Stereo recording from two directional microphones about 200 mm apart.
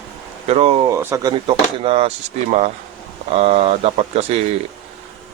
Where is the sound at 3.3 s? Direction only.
30° right (ahead or behind).